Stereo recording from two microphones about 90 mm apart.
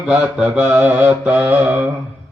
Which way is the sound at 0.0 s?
10° right (ahead or behind).